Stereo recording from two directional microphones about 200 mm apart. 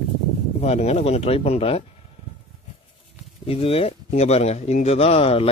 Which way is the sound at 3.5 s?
30° left (ahead or behind).